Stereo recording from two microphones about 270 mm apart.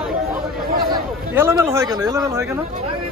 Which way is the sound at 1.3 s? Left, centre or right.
Centre.